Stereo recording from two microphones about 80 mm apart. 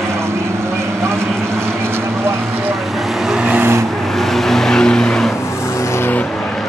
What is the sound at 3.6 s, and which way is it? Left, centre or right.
Vehicle, right.